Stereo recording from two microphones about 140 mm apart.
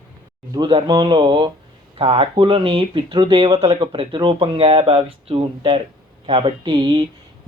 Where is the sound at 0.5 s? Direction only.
35° right (ahead or behind).